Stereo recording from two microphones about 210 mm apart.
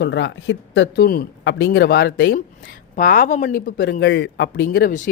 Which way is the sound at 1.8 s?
50° left (ahead or behind).